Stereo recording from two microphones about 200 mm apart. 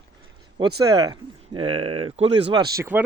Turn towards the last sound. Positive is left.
turn(degrees=-10)  # may be behind; listen again after turning